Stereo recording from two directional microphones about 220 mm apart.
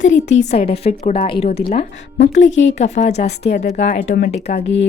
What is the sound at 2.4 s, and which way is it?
Speech, 60° left (ahead or behind).